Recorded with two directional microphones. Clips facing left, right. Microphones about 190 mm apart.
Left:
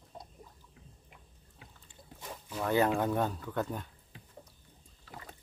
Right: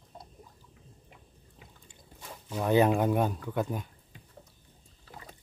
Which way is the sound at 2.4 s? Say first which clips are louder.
Right 4 dB; 20° right (ahead or behind).